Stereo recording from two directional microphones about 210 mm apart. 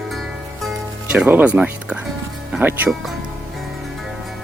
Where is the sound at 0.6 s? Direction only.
5° right (ahead or behind).